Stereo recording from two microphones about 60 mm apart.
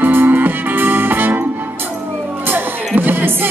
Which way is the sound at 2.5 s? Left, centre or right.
Right.